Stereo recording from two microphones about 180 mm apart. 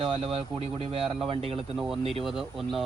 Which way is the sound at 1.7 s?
5° right (ahead or behind).